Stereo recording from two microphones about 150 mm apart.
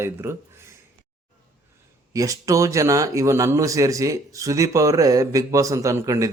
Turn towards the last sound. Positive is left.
turn(degrees=-20)  # may be behind; listen again after turning